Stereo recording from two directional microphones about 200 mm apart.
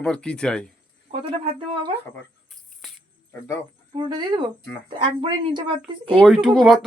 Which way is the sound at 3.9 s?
20° right (ahead or behind).